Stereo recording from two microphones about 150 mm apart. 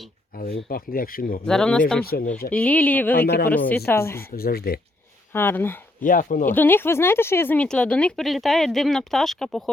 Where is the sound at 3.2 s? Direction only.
90° left.